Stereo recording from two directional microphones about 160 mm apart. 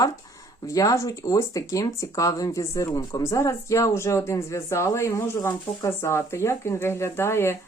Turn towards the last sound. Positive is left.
turn(degrees=15)  # may be behind; listen again after turning